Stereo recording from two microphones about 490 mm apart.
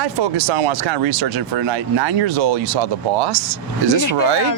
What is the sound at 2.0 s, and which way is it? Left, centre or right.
Speech, right.